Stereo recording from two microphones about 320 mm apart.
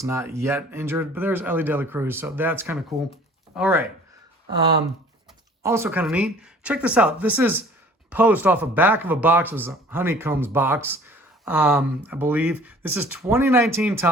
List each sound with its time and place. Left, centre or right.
0.0 s speech: centre
5.6 s speech: centre